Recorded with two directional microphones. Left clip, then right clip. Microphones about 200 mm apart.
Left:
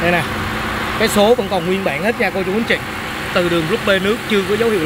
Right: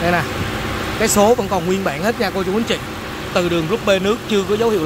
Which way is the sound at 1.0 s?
15° right (ahead or behind).